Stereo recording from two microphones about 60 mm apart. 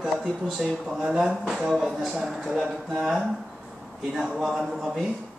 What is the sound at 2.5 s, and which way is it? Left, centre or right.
Speech, centre.